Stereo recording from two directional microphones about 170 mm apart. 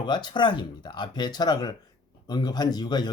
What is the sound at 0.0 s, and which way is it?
Speech, 25° left (ahead or behind).